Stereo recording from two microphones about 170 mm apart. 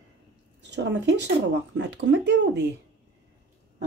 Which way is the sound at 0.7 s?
90° right.